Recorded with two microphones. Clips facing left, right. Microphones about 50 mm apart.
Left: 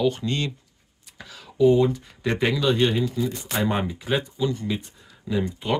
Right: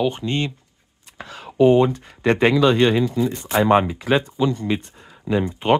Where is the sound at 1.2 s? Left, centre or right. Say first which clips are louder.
Right 4 dB; right.